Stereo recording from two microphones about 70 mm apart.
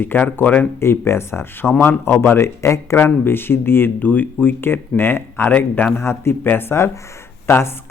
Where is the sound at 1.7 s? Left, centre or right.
Left.